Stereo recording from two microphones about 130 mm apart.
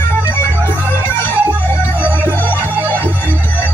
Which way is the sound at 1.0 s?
15° left (ahead or behind).